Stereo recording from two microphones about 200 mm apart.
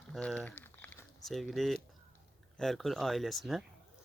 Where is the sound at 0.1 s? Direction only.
5° left (ahead or behind).